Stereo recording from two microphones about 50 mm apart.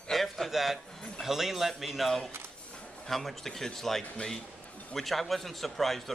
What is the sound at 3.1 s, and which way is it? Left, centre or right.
Speech, centre.